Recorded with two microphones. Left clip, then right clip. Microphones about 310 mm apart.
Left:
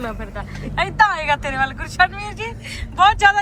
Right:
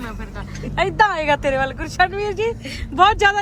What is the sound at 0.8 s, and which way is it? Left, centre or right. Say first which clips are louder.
Speech: even; right.